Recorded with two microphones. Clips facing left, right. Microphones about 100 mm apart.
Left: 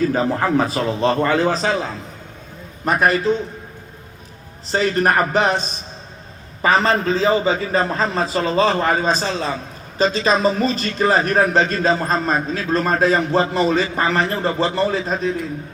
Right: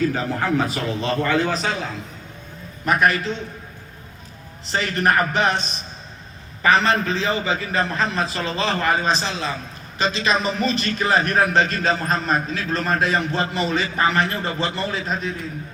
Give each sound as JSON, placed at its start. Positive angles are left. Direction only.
{"t": 0.1, "sound": "a man's voice", "side_deg": 35}
{"t": 2.8, "sound": "a man's voice", "side_deg": 35}
{"t": 4.7, "sound": "a man's voice", "side_deg": 35}
{"t": 6.7, "sound": "a man's voice", "side_deg": 40}